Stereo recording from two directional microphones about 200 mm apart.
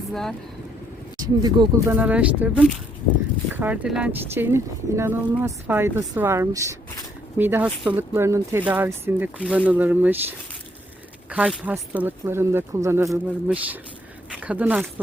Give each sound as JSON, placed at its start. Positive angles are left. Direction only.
{"t": 0.1, "sound": "speech", "side_deg": 0}
{"t": 1.4, "sound": "speech", "side_deg": -20}
{"t": 2.0, "sound": "speech", "side_deg": -5}
{"t": 11.3, "sound": "speech", "side_deg": -5}